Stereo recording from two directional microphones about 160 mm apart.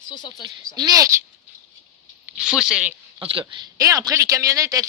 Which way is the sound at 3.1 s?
30° right (ahead or behind).